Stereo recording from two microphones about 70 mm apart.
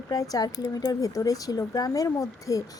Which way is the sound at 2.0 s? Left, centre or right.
Left.